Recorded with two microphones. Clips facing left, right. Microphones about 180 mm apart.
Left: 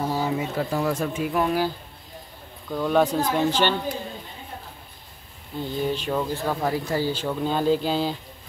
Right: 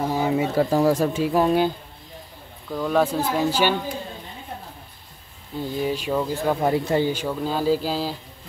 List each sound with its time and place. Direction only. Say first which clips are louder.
0.0 s a sound: right 3 dB; 20° right (ahead or behind)
0.6 s speech: right 8 dB; 40° right (ahead or behind)
2.7 s speech: even; centre (ahead or behind)
5.6 s speech: right 1 dB; 10° right (ahead or behind)
6.7 s speech: right 4 dB; 25° right (ahead or behind)
7.1 s speech: even; 15° right (ahead or behind)